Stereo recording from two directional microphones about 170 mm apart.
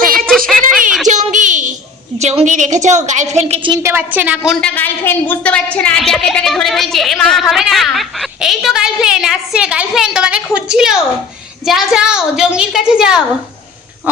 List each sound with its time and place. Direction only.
0.3 s a sound: centre (ahead or behind)
0.6 s a sound: 50° right (ahead or behind)
2.1 s a woman's voice: 40° right (ahead or behind)
3.5 s a woman's voice: 30° right (ahead or behind)
3.8 s a woman's voice: 10° right (ahead or behind)
4.6 s a woman's voice: 10° left (ahead or behind)